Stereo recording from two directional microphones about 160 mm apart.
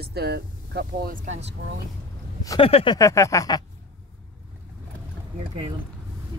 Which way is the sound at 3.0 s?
20° left (ahead or behind).